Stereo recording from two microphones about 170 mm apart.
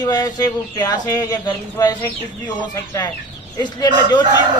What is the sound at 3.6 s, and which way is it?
Speech, 25° left (ahead or behind).